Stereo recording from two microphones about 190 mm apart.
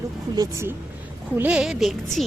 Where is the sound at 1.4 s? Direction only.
5° right (ahead or behind).